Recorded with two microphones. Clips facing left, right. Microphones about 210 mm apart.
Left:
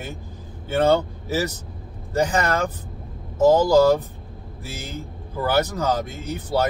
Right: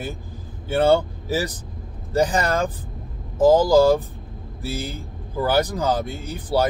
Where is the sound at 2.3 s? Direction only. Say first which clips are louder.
Even; 35° right (ahead or behind).